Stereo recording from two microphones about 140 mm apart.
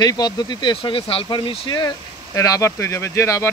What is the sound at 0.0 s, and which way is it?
Speech, 30° left (ahead or behind).